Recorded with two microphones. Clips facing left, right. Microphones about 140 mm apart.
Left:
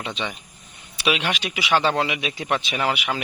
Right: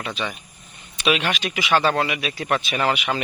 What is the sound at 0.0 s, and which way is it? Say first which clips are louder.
Speech: right 1 dB; 20° left (ahead or behind).